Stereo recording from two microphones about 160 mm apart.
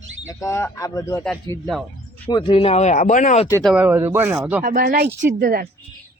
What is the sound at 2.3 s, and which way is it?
Speech, 30° left (ahead or behind).